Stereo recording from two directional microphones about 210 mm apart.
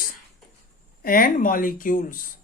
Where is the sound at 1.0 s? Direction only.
45° left (ahead or behind).